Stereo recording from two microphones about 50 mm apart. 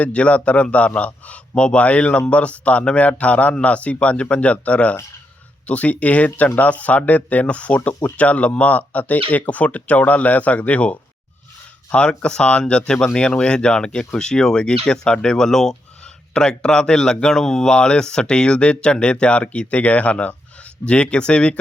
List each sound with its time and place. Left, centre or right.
0.0 s speech: left